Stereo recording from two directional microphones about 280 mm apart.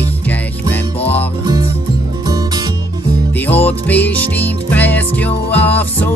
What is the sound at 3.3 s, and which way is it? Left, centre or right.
Music, centre.